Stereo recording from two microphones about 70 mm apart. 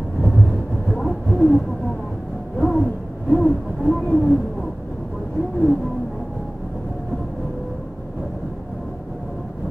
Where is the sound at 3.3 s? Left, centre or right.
Centre.